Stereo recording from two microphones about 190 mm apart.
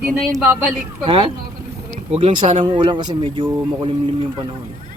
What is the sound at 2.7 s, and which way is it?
Speech, 25° right (ahead or behind).